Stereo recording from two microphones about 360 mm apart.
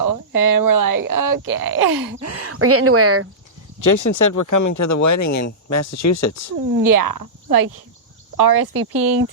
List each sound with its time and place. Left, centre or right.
0.0 s speech: right
2.1 s speech: right
3.8 s speech: left
6.8 s speech: right
8.4 s speech: right